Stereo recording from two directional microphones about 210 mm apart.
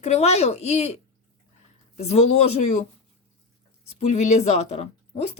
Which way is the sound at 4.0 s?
30° left (ahead or behind).